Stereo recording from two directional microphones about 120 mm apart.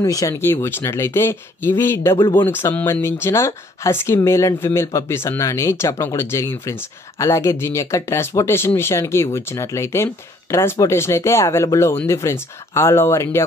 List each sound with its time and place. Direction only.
0.0 s speech: 30° left (ahead or behind)
0.4 s speech: 20° left (ahead or behind)